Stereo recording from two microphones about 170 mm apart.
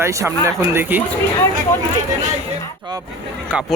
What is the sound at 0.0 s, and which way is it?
Speech, 15° right (ahead or behind).